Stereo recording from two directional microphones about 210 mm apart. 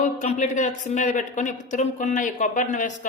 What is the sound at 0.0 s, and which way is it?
Speech, 35° left (ahead or behind).